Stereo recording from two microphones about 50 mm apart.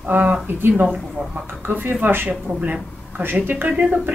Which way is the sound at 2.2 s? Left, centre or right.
Right.